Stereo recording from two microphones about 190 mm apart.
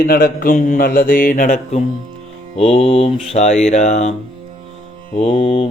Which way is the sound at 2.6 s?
30° left (ahead or behind).